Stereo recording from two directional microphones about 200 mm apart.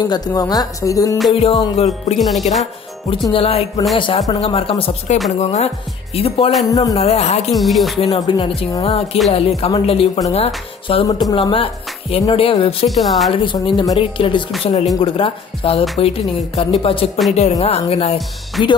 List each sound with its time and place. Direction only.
0.0 s a woman's voice: 20° left (ahead or behind)
1.3 s music: 30° left (ahead or behind)
2.1 s a woman's voice: centre (ahead or behind)
3.3 s music: 30° left (ahead or behind)
5.4 s speech: 35° left (ahead or behind)
6.1 s music: 30° left (ahead or behind)
6.7 s a woman's voice: 15° left (ahead or behind)
7.0 s speech: 30° left (ahead or behind)
7.5 s a woman's voice: centre (ahead or behind)
8.0 s music: 30° left (ahead or behind)
12.8 s a woman's voice: centre (ahead or behind)
13.3 s music: 25° left (ahead or behind)
17.3 s speech: 30° left (ahead or behind)